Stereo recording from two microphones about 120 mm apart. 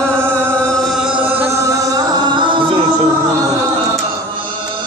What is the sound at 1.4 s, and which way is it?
Music, 30° right (ahead or behind).